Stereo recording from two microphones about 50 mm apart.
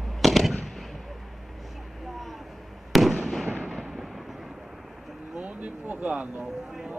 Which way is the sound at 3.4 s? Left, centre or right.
Right.